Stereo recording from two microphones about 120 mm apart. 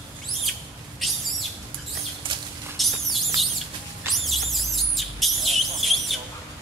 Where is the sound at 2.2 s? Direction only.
45° right (ahead or behind).